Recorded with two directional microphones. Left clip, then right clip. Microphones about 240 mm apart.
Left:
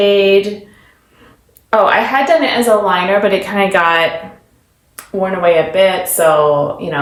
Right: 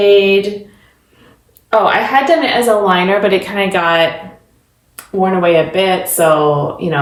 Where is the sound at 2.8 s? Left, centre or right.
Centre.